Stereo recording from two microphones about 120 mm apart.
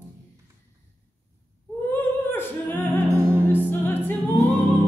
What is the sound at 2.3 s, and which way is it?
Singing, 20° left (ahead or behind).